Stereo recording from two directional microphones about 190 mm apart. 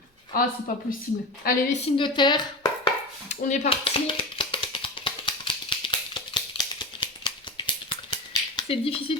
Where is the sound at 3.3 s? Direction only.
40° left (ahead or behind).